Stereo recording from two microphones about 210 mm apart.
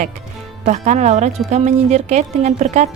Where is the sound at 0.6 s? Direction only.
35° right (ahead or behind).